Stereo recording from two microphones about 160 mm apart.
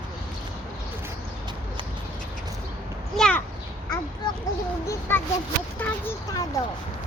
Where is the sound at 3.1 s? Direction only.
5° left (ahead or behind).